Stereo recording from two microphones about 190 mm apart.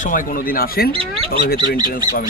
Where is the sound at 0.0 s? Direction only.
45° left (ahead or behind).